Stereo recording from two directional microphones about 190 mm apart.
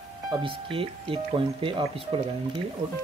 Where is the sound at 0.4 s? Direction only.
25° right (ahead or behind).